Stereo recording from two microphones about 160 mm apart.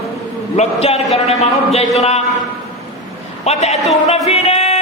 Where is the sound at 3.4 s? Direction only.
40° left (ahead or behind).